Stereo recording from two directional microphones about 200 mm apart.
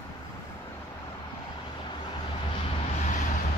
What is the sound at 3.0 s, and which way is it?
Vehicle, 35° left (ahead or behind).